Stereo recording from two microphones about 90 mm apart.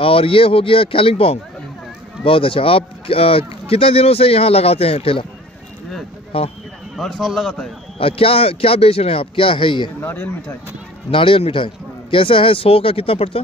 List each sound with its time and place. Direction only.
0.0 s speech: 90° left
7.0 s a man's voice: centre (ahead or behind)
8.0 s speech: 90° left; by 9.8 s 70° left (ahead or behind)
9.9 s a man's voice: 20° left (ahead or behind)
11.1 s speech: 75° left (ahead or behind)